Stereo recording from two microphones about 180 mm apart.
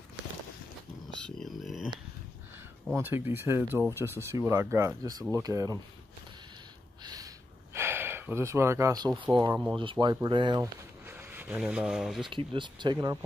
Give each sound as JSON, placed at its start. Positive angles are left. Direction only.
{"t": 1.2, "sound": "a sound", "side_deg": 0}
{"t": 3.0, "sound": "speech", "side_deg": -10}
{"t": 7.7, "sound": "gasp", "side_deg": -10}
{"t": 9.2, "sound": "speech", "side_deg": -25}
{"t": 9.5, "sound": "speech", "side_deg": -5}
{"t": 9.8, "sound": "speech", "side_deg": -25}
{"t": 11.1, "sound": "speech", "side_deg": -10}
{"t": 12.3, "sound": "speech", "side_deg": -25}